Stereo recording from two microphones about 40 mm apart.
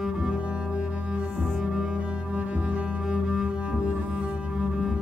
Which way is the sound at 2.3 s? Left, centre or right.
Right.